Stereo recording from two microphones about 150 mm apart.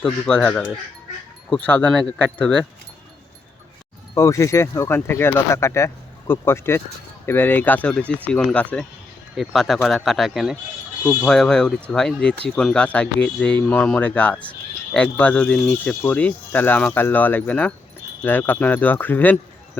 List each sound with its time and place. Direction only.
0.3 s speech: 5° left (ahead or behind)
4.1 s speech: 20° left (ahead or behind)